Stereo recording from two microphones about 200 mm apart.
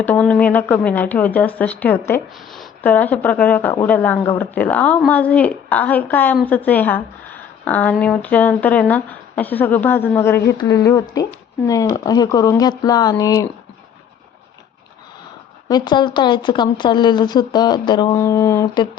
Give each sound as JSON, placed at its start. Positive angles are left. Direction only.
{"t": 0.0, "sound": "a woman's voice", "side_deg": 5}
{"t": 15.7, "sound": "speech", "side_deg": 20}